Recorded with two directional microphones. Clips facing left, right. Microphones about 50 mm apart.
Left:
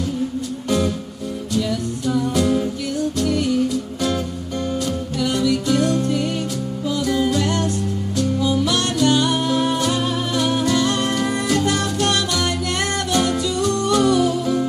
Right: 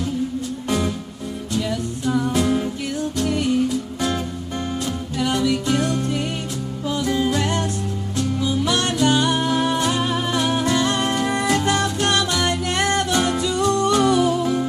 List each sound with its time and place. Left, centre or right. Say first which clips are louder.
1.6 s music: left 1 dB; right
4.8 s music: left 1 dB; right